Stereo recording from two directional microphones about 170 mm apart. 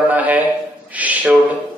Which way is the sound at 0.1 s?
10° right (ahead or behind).